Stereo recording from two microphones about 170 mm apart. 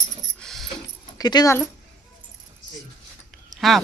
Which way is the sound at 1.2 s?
25° left (ahead or behind).